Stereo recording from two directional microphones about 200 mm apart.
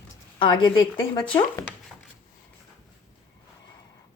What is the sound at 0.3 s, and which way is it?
Speech, 20° left (ahead or behind).